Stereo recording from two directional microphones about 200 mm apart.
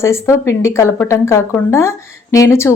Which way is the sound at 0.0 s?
15° left (ahead or behind).